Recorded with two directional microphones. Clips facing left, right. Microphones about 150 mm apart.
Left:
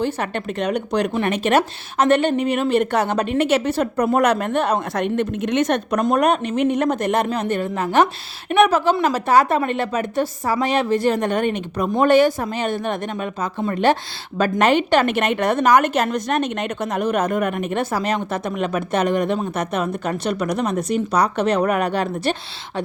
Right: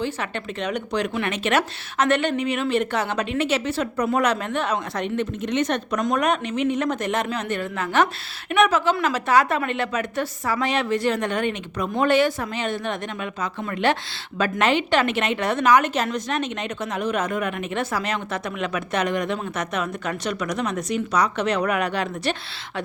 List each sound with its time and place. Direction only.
0.0 s a woman's voice: 45° left (ahead or behind)
6.1 s a woman's voice: 35° left (ahead or behind)
6.6 s speech: 55° left (ahead or behind)
7.3 s a woman's voice: 35° left (ahead or behind)